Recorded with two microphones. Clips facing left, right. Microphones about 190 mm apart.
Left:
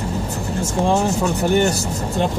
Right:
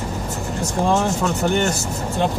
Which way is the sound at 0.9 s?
15° left (ahead or behind).